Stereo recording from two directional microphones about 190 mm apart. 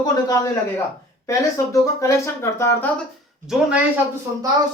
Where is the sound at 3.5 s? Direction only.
5° right (ahead or behind).